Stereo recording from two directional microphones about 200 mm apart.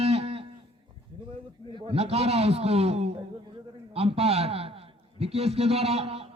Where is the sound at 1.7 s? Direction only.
25° right (ahead or behind).